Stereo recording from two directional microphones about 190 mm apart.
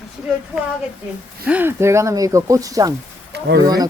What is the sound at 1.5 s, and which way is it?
Speech, 10° right (ahead or behind).